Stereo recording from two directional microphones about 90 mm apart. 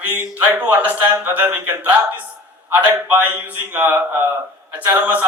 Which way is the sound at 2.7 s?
20° right (ahead or behind).